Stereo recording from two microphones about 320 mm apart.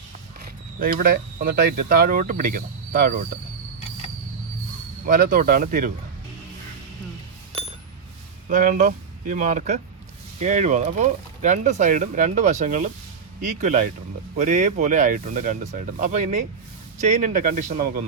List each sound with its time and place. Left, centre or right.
0.8 s speech: right
5.0 s speech: right
8.4 s speech: right